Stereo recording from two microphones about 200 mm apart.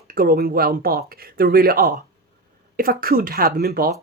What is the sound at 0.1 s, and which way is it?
Speech, 45° right (ahead or behind).